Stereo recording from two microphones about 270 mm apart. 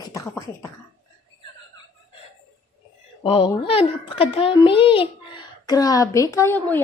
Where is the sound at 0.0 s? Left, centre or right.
Centre.